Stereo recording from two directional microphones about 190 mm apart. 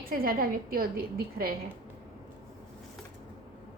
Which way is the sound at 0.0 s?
50° right (ahead or behind).